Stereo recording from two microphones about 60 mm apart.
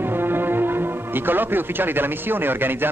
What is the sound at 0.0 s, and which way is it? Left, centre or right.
Speech, right.